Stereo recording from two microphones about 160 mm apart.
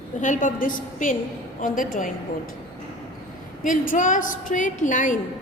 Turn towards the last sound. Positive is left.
turn(degrees=50)  # may be behind; listen again after turning